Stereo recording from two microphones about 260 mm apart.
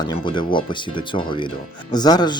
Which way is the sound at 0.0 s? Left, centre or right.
Centre.